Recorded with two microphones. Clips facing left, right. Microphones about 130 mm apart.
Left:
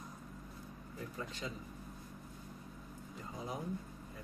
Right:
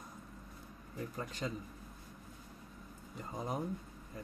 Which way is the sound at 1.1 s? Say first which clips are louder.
Right 3 dB; 45° right (ahead or behind).